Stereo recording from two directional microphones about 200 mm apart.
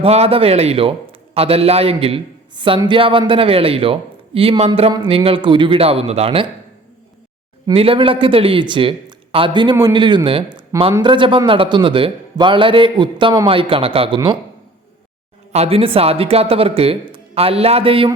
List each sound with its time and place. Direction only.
0.0 s a man's voice: 30° right (ahead or behind)
7.7 s a man's voice: 30° right (ahead or behind)
15.5 s a man's voice: 30° right (ahead or behind)